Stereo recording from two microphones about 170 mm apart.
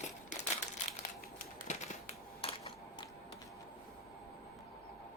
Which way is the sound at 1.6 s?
40° left (ahead or behind).